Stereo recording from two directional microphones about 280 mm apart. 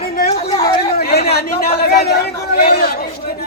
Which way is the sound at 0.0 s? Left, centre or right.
Left.